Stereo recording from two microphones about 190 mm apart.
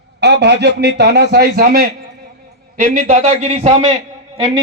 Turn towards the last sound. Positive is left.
turn(degrees=-35)  # may be behind; listen again after turning